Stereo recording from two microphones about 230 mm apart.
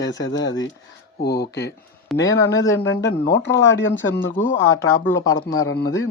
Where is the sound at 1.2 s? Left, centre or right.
Left.